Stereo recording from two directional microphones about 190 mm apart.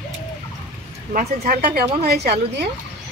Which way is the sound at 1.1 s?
50° right (ahead or behind).